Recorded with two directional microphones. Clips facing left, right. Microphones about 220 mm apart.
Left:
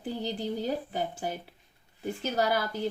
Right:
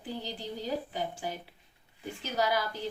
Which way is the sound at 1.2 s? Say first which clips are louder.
Left 3 dB; 45° left (ahead or behind).